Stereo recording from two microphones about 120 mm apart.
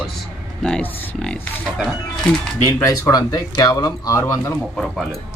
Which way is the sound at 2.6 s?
25° left (ahead or behind).